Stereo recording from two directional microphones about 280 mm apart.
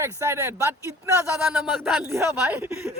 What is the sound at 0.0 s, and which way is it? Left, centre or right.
A man's voice, centre.